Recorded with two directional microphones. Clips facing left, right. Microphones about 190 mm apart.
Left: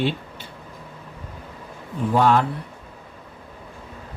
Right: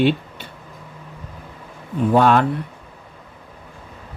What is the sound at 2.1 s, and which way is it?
Speech, 70° right (ahead or behind).